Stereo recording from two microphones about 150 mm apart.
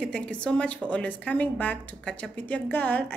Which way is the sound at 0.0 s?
5° left (ahead or behind).